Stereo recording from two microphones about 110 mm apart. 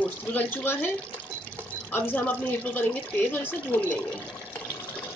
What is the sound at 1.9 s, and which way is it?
Speech, 20° left (ahead or behind).